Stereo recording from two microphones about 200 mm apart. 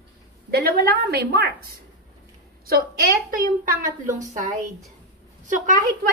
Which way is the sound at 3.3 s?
45° right (ahead or behind).